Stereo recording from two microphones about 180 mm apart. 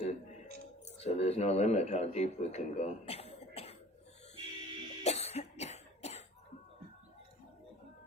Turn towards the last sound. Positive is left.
turn(degrees=35)  # may be behind; listen again after turning